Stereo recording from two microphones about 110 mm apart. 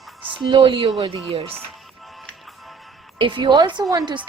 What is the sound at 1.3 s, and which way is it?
Speech, 60° right (ahead or behind).